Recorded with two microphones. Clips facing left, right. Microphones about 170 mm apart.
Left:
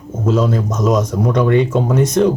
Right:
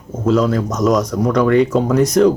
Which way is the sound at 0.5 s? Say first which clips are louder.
Right 1 dB; 25° left (ahead or behind).